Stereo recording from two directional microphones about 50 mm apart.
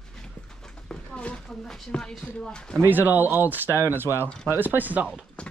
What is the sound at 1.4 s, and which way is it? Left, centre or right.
Speech, centre.